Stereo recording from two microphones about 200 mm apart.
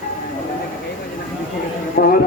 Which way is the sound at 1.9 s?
50° left (ahead or behind).